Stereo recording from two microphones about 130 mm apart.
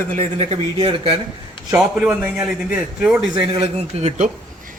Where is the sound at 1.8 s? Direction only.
5° right (ahead or behind).